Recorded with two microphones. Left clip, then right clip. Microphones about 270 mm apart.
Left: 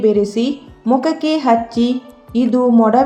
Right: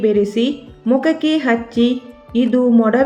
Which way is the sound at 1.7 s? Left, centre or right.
Centre.